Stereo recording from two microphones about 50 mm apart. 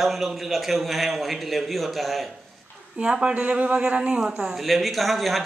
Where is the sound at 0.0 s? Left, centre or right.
Centre.